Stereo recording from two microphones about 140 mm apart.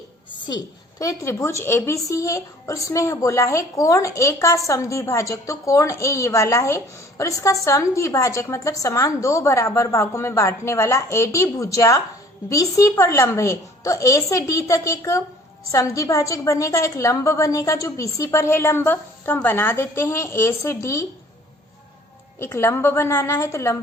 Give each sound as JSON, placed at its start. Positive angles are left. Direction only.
{"t": 0.4, "sound": "a woman's voice", "side_deg": 30}
{"t": 22.4, "sound": "a woman's voice", "side_deg": 15}